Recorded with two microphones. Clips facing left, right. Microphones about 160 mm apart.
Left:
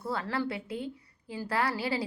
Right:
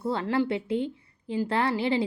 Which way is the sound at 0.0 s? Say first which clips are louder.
Right 6 dB; 25° right (ahead or behind).